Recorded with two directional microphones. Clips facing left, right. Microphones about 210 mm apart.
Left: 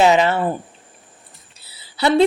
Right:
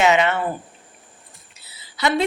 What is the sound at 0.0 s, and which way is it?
Speech, 35° left (ahead or behind).